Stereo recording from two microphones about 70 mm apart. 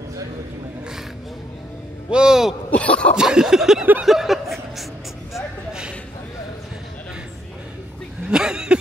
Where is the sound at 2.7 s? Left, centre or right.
Centre.